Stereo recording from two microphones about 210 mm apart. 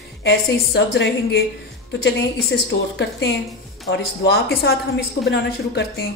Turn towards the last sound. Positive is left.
turn(degrees=55)  # may be behind; listen again after turning